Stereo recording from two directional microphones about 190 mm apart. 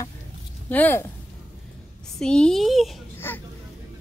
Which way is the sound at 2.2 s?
5° left (ahead or behind).